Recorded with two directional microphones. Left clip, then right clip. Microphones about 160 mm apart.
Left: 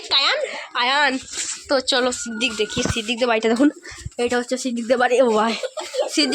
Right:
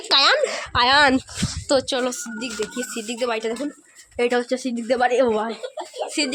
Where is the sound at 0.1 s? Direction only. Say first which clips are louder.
Right 2 dB; 70° right (ahead or behind).